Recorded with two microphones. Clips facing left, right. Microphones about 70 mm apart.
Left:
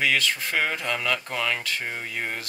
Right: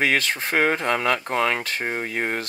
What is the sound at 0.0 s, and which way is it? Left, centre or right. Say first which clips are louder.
Speech: right 2 dB; right.